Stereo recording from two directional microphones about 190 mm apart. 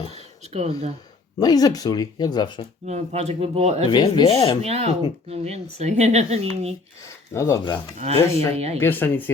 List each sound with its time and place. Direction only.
0.1 s a sound: 35° right (ahead or behind)
1.4 s speech: 20° left (ahead or behind)
2.8 s speech: 35° right (ahead or behind)
3.8 s speech: 25° left (ahead or behind)
4.6 s speech: 35° right (ahead or behind)
7.0 s speech: 15° left (ahead or behind)
7.9 s speech: 35° right (ahead or behind)
8.8 s speech: 10° left (ahead or behind)